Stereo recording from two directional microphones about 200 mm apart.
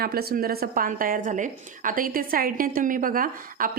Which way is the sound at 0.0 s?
50° right (ahead or behind).